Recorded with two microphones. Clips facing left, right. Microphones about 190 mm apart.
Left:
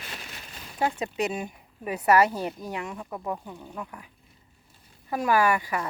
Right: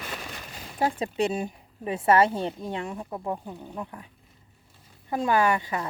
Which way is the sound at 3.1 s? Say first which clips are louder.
Right 1 dB; 15° right (ahead or behind).